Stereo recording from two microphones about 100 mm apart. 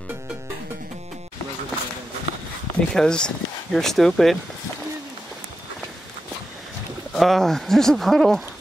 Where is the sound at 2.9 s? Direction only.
5° left (ahead or behind).